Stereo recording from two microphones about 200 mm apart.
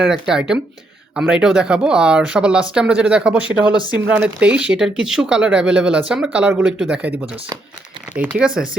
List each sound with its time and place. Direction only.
0.0 s speech: 5° right (ahead or behind)
3.4 s speech: 20° left (ahead or behind)
3.9 s speech: 5° right (ahead or behind)
8.1 s speech: 5° right (ahead or behind)